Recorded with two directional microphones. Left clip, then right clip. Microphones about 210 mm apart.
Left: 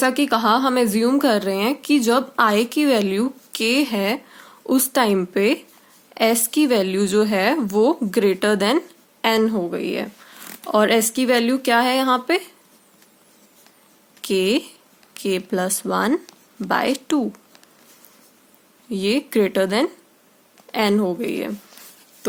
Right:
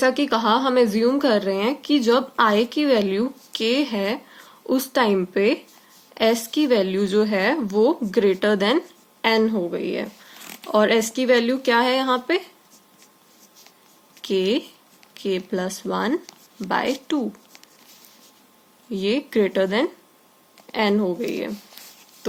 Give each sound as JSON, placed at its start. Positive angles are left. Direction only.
{"t": 0.0, "sound": "speech", "side_deg": 55}
{"t": 10.4, "sound": "zipper", "side_deg": 30}
{"t": 10.7, "sound": "speech", "side_deg": 60}
{"t": 14.2, "sound": "speech", "side_deg": 60}
{"t": 18.9, "sound": "speech", "side_deg": 60}